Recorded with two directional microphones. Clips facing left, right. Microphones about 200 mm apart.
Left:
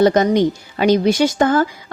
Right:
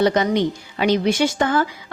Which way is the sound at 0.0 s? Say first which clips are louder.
Left 4 dB; 45° left (ahead or behind).